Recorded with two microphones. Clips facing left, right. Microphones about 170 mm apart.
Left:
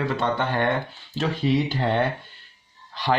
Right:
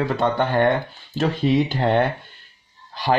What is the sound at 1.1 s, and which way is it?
Speech, 50° right (ahead or behind).